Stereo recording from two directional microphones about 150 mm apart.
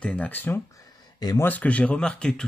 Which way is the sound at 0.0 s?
10° left (ahead or behind).